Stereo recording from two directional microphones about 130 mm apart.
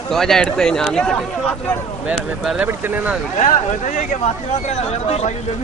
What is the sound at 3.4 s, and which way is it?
Speech, 70° left (ahead or behind).